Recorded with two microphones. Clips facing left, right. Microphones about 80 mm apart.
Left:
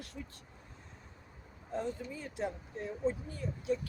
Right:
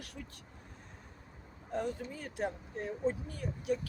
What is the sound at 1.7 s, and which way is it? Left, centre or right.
Speech, right.